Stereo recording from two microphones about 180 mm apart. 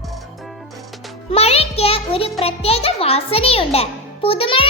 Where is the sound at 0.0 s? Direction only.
Centre (ahead or behind).